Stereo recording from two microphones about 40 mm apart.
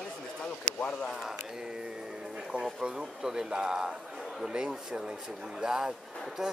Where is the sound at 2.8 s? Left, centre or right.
Centre.